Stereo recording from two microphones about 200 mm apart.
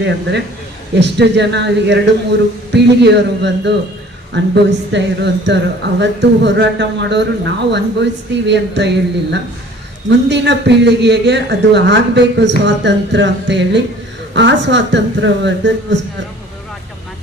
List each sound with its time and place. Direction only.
0.0 s a man's voice: 60° right (ahead or behind)
10.1 s a man's voice: 60° right (ahead or behind)